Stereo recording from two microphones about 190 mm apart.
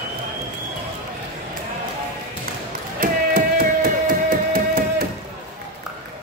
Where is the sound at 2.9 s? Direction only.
50° right (ahead or behind).